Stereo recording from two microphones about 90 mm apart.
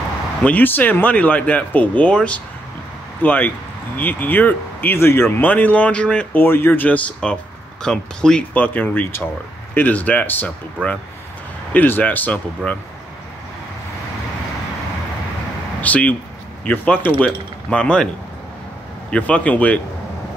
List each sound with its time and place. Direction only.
0.4 s speech: 20° left (ahead or behind)
6.3 s speech: 25° left (ahead or behind)
7.8 s speech: 5° left (ahead or behind)
15.8 s speech: 15° left (ahead or behind)
19.0 s speech: 15° left (ahead or behind)